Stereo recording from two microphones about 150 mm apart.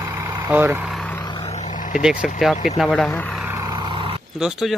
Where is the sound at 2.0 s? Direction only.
5° right (ahead or behind).